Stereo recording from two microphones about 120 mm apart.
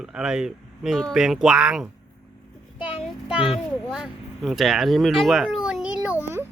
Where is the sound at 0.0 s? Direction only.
5° right (ahead or behind).